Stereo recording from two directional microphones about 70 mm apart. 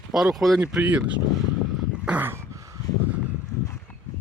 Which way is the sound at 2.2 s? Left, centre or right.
Right.